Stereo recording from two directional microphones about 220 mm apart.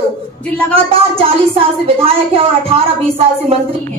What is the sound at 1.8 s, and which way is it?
Speech, 25° right (ahead or behind).